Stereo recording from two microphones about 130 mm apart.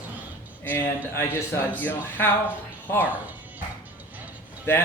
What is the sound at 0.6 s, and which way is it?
Speech, 15° left (ahead or behind).